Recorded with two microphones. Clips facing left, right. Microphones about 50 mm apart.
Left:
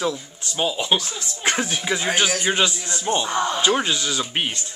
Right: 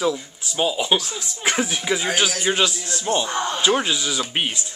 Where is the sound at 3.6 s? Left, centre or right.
Centre.